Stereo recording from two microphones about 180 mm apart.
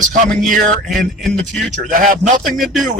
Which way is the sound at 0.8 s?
Centre (ahead or behind).